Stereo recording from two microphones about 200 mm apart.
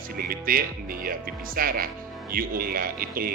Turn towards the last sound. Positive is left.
turn(degrees=-45)  # may be behind; listen again after turning